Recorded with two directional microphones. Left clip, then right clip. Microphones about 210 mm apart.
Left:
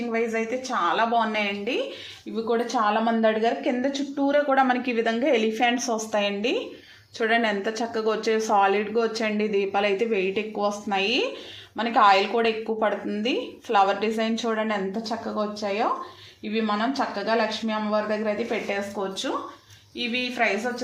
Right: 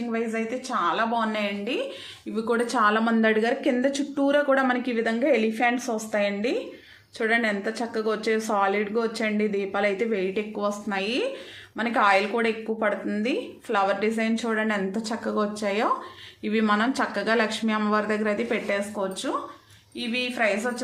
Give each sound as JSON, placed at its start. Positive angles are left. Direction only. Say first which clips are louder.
{"t": 0.1, "sound": "speech", "louder": "left 3 dB", "side_deg": 0}
{"t": 2.3, "sound": "a woman's voice", "louder": "even", "side_deg": -20}
{"t": 15.2, "sound": "a woman's voice", "louder": "right 4 dB", "side_deg": -25}